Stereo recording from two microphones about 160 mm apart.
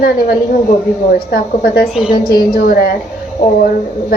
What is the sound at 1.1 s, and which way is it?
A child's voice, 70° left (ahead or behind).